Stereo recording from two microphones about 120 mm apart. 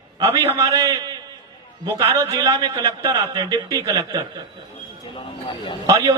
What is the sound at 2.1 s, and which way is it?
A man's voice, 25° right (ahead or behind).